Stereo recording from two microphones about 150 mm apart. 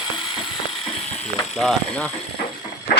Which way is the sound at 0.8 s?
45° left (ahead or behind).